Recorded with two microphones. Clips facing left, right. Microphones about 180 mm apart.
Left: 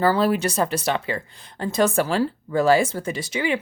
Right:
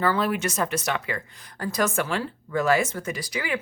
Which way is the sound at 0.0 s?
35° left (ahead or behind).